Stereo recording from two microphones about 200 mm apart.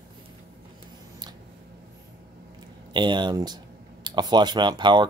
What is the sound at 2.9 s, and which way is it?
Speech, 20° right (ahead or behind).